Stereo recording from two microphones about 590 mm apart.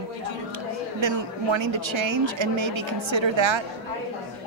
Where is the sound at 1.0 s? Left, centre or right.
Right.